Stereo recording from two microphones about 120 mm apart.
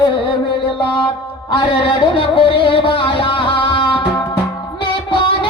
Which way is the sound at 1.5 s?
45° left (ahead or behind).